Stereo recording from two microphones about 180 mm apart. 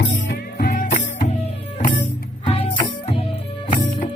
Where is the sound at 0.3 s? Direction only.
50° left (ahead or behind).